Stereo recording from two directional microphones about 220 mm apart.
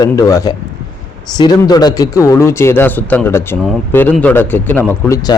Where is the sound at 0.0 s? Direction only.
15° left (ahead or behind).